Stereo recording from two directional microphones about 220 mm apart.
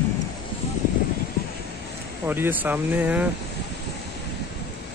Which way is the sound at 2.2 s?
10° right (ahead or behind).